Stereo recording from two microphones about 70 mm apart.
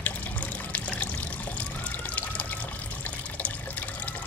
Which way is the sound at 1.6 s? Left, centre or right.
Left.